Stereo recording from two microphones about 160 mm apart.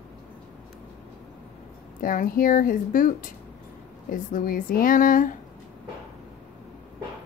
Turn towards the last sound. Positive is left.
turn(degrees=60)  # may be behind; listen again after turning